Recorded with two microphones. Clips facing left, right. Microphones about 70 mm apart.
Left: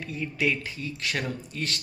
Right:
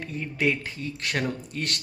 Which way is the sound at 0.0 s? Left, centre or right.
Right.